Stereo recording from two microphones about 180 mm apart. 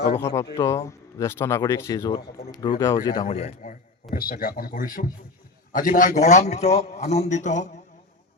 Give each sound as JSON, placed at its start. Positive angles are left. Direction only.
{"t": 0.5, "sound": "speech", "side_deg": 15}
{"t": 3.2, "sound": "a man's voice", "side_deg": 35}
{"t": 4.1, "sound": "a man's voice", "side_deg": 55}